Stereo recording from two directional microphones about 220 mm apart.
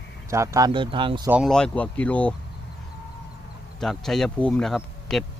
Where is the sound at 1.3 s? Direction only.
Centre (ahead or behind).